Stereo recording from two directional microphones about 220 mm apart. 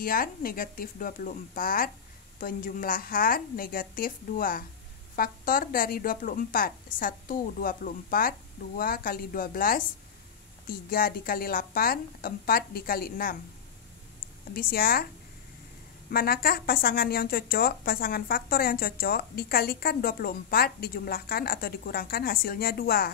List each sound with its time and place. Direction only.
0.0 s a woman's voice: 40° left (ahead or behind)
14.5 s a woman's voice: 40° left (ahead or behind)
16.1 s speech: 45° left (ahead or behind)